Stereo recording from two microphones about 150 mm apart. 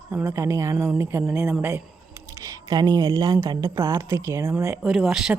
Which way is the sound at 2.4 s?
25° right (ahead or behind).